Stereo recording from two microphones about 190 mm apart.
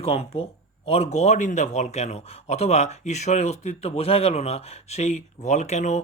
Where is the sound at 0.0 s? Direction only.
30° left (ahead or behind).